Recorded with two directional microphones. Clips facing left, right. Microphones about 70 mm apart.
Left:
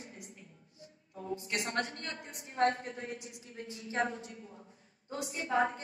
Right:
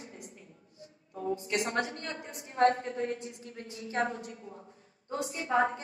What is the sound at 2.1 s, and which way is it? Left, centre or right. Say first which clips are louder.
A woman's voice: right 3 dB; right.